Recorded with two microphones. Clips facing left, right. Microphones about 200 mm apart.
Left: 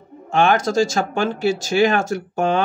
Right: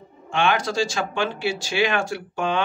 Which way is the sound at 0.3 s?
40° left (ahead or behind).